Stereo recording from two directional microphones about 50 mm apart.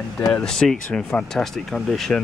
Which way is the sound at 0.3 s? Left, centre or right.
Centre.